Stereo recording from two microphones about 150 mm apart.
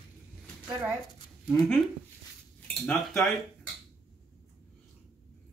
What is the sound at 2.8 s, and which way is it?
Speech, centre (ahead or behind).